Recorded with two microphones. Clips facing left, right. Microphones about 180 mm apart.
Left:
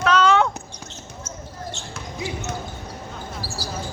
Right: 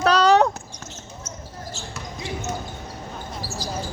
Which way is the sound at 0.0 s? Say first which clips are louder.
Right 2 dB; 35° right (ahead or behind).